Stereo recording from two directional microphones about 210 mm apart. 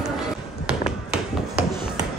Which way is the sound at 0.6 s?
5° right (ahead or behind).